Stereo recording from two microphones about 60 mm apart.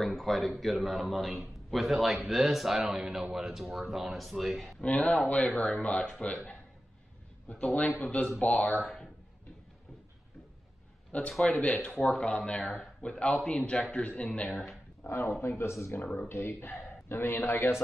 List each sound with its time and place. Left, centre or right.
0.0 s a man's voice: centre
4.8 s a man's voice: left
7.4 s a man's voice: left
11.1 s a man's voice: centre
11.3 s a man's voice: centre
11.6 s a man's voice: centre
15.0 s speech: left